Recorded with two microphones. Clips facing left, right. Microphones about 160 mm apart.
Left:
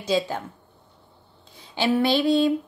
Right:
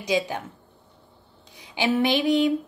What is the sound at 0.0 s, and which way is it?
Speech, 15° right (ahead or behind).